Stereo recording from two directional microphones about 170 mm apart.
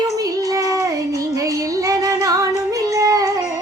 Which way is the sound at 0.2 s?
20° right (ahead or behind).